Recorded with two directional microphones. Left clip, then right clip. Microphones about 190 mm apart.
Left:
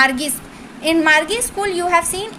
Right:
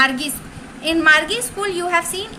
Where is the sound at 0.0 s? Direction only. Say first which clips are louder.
Left 1 dB; 20° left (ahead or behind).